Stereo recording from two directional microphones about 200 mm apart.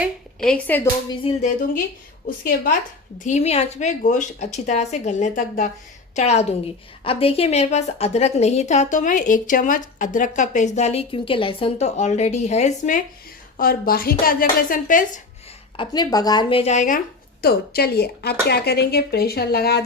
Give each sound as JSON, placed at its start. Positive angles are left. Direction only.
{"t": 0.4, "sound": "speech", "side_deg": 5}
{"t": 1.2, "sound": "a woman's voice", "side_deg": 30}
{"t": 3.2, "sound": "a woman's voice", "side_deg": 35}
{"t": 13.6, "sound": "a woman's voice", "side_deg": 45}
{"t": 15.8, "sound": "a woman's voice", "side_deg": 20}
{"t": 17.4, "sound": "a woman's voice", "side_deg": 50}